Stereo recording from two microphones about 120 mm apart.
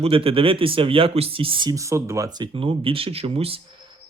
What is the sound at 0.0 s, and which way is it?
Speech, 50° right (ahead or behind).